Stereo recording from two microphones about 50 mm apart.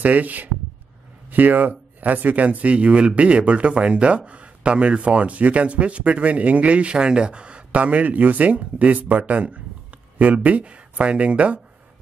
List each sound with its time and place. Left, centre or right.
0.0 s speech: right